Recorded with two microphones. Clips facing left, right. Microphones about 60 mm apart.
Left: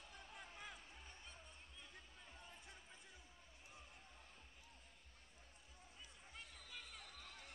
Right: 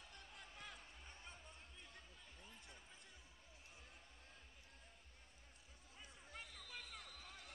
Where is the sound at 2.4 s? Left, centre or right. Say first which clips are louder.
Right 1 dB; centre.